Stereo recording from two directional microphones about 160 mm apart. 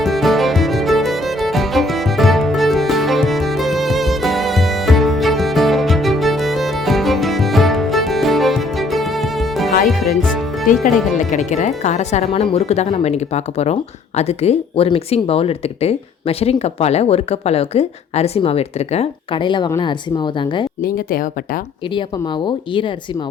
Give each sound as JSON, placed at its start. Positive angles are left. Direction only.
{"t": 0.0, "sound": "music", "side_deg": 0}
{"t": 11.2, "sound": "speech", "side_deg": 50}
{"t": 20.8, "sound": "speech", "side_deg": 60}
{"t": 21.9, "sound": "speech", "side_deg": 30}